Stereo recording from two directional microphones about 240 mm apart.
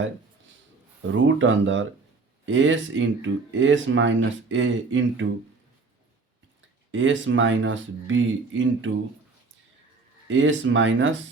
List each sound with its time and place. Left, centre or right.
1.1 s speech: right
6.9 s speech: right
10.2 s speech: right